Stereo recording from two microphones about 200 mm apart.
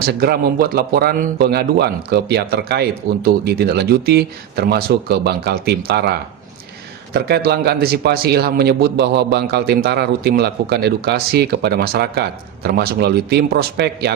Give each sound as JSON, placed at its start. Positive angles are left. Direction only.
{"t": 0.0, "sound": "a man's voice", "side_deg": -50}